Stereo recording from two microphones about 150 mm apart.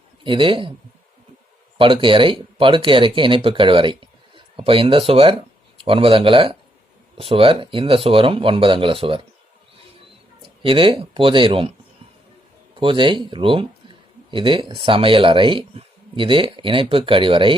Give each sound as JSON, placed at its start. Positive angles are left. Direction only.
{"t": 0.3, "sound": "speech", "side_deg": -35}
{"t": 1.8, "sound": "speech", "side_deg": -35}
{"t": 10.6, "sound": "speech", "side_deg": -35}
{"t": 12.8, "sound": "speech", "side_deg": -35}